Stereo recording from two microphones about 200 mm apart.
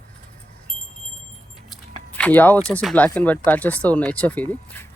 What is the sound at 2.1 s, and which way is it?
Speech, 5° left (ahead or behind).